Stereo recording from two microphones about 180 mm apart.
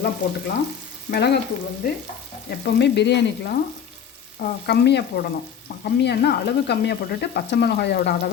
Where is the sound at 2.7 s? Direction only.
70° left (ahead or behind).